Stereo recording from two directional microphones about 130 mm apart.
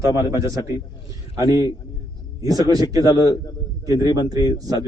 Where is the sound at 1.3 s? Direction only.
25° right (ahead or behind).